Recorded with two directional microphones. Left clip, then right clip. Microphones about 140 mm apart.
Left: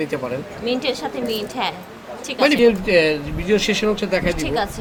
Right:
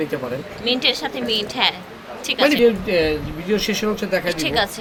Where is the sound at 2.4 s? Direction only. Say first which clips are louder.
Left 1 dB; 25° left (ahead or behind).